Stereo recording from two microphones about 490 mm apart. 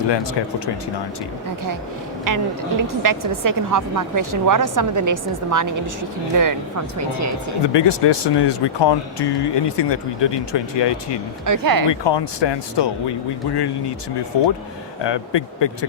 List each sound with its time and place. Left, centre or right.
0.1 s speech: left
2.2 s a woman's voice: right
7.7 s speech: left
11.4 s speech: right
11.9 s speech: left
14.3 s speech: left